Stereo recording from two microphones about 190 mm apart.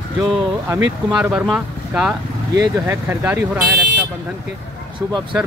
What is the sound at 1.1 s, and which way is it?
Speech, 5° right (ahead or behind).